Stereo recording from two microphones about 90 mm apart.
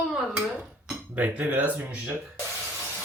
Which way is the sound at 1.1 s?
20° right (ahead or behind).